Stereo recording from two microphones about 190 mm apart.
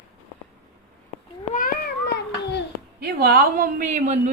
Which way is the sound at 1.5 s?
45° left (ahead or behind).